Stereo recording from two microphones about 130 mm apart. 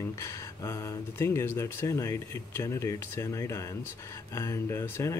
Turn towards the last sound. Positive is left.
turn(degrees=20)  # may be behind; listen again after turning